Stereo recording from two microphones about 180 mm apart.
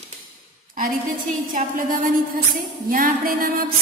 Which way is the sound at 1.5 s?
50° right (ahead or behind).